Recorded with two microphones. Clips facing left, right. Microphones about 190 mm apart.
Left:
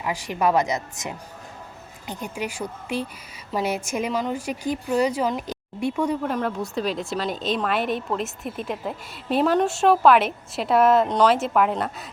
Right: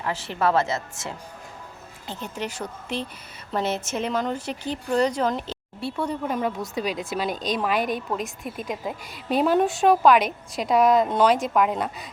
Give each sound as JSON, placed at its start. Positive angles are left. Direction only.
{"t": 0.0, "sound": "a woman's voice", "side_deg": 15}
{"t": 6.2, "sound": "a woman's voice", "side_deg": 0}